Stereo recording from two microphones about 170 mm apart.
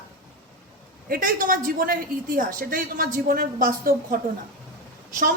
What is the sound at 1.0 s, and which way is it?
A woman's voice, 55° right (ahead or behind).